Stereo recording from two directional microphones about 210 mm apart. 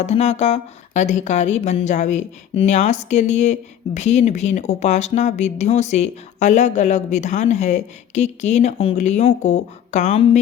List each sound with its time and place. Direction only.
0.0 s speech: 30° left (ahead or behind)